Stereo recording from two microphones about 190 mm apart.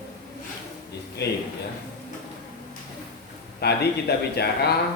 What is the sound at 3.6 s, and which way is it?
A man's voice, 60° left (ahead or behind).